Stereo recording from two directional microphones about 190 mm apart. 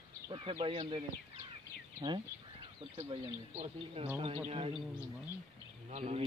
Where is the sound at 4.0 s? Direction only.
35° right (ahead or behind).